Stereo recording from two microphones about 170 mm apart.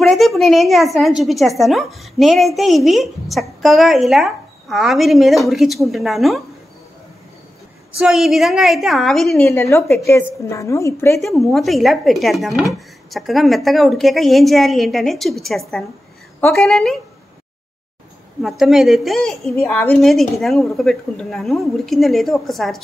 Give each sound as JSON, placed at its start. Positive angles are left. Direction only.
{"t": 0.0, "sound": "speech", "side_deg": 0}
{"t": 8.0, "sound": "speech", "side_deg": 0}
{"t": 9.4, "sound": "speech", "side_deg": 15}
{"t": 11.1, "sound": "speech", "side_deg": 0}
{"t": 18.4, "sound": "speech", "side_deg": 0}